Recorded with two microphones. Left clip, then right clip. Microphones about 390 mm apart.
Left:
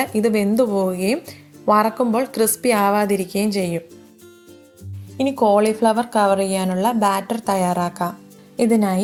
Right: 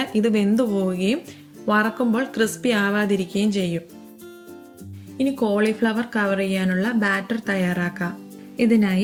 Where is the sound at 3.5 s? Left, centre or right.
Centre.